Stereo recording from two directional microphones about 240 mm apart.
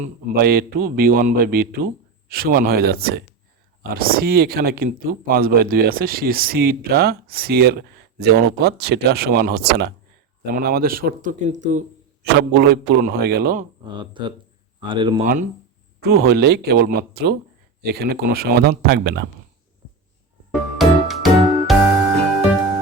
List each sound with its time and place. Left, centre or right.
0.0 s speech: right
13.8 s speech: centre
15.2 s speech: right
20.7 s music: centre